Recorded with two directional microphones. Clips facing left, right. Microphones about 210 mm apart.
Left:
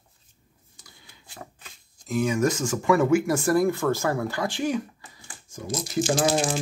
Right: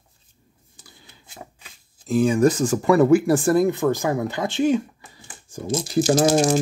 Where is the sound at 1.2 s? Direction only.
20° right (ahead or behind).